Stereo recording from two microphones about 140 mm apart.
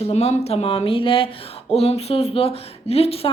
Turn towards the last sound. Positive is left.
turn(degrees=45)  # may be behind; listen again after turning